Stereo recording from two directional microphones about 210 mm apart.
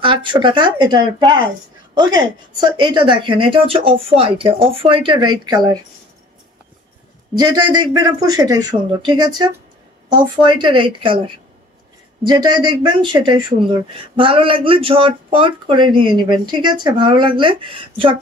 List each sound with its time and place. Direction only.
0.0 s speech: 25° right (ahead or behind)
7.7 s speech: 20° right (ahead or behind)